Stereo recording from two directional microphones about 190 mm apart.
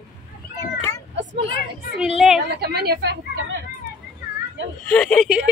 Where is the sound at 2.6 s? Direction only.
55° right (ahead or behind).